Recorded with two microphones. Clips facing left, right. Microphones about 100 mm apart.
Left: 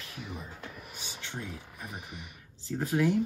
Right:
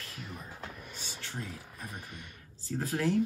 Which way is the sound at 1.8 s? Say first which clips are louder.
Left 1 dB; 10° left (ahead or behind).